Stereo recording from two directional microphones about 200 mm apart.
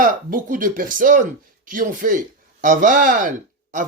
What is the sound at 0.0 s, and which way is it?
A man's voice, 45° right (ahead or behind).